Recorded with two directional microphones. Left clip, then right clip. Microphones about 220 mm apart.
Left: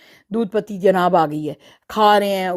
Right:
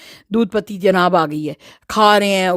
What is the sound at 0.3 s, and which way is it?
Speech, 30° right (ahead or behind).